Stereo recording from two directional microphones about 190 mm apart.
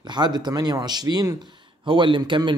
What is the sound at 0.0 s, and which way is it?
Speech, 25° right (ahead or behind).